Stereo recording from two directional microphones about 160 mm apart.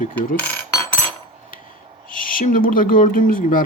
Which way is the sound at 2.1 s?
60° left (ahead or behind).